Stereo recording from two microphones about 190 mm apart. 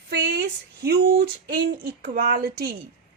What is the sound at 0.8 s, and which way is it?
A woman's voice, 60° right (ahead or behind).